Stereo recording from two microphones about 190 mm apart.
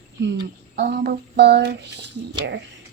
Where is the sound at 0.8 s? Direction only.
60° right (ahead or behind).